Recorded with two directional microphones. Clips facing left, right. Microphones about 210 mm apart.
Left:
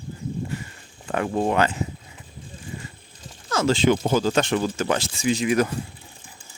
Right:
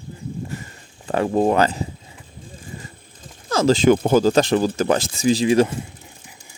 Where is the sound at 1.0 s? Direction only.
35° right (ahead or behind).